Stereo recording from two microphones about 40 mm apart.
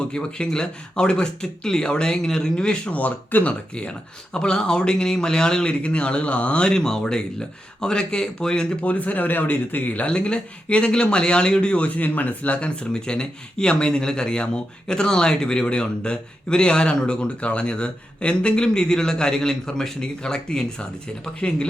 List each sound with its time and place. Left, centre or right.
0.0 s speech: left
2.9 s speech: left
4.4 s speech: left
5.8 s speech: left
6.7 s speech: centre
8.8 s speech: left
10.1 s speech: left
11.9 s speech: left
12.5 s speech: left